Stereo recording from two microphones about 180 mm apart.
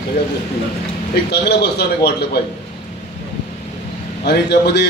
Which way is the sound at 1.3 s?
65° left (ahead or behind).